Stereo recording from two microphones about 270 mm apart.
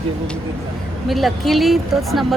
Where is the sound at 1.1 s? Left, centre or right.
Centre.